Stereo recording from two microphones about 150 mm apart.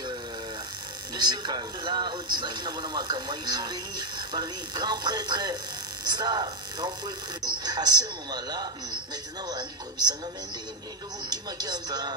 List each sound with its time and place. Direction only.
1.1 s speech: 30° right (ahead or behind)
11.2 s speech: 25° right (ahead or behind)